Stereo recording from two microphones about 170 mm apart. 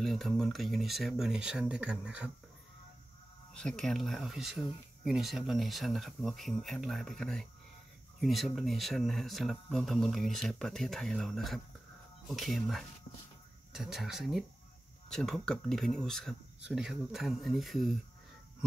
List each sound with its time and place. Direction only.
0.0 s speech: centre (ahead or behind)
3.5 s speech: 5° left (ahead or behind)